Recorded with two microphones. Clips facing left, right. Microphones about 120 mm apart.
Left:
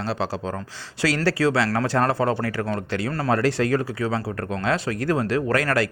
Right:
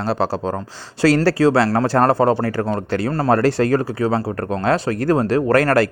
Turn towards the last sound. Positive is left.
turn(degrees=-45)  # may be behind; listen again after turning